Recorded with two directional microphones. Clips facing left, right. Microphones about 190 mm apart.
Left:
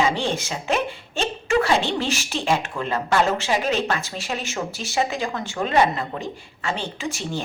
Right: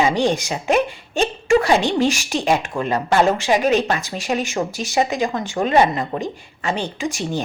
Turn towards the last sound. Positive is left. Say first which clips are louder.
# right 5 dB
turn(degrees=-15)  # may be behind; listen again after turning